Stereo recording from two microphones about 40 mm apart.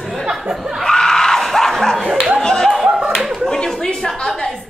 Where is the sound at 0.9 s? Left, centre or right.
Centre.